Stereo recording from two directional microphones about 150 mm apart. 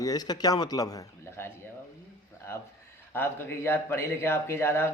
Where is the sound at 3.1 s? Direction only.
15° left (ahead or behind).